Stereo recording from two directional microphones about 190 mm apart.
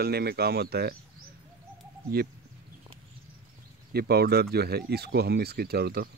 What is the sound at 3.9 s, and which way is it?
Speech, 55° right (ahead or behind).